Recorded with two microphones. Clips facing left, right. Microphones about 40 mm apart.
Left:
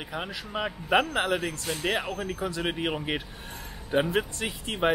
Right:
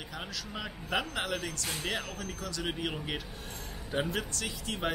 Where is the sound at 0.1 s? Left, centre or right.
Left.